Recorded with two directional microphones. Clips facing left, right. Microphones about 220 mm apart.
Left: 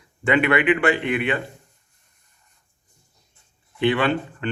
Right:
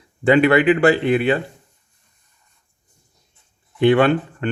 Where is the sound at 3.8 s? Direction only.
45° right (ahead or behind).